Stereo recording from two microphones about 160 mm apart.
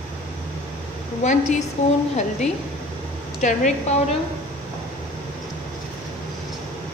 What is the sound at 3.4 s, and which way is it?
Speech, 50° left (ahead or behind).